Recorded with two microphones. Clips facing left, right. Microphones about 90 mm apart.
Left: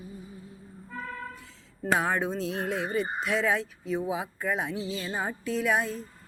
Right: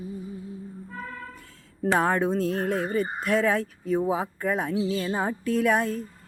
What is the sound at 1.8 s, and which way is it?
Speech, 50° right (ahead or behind).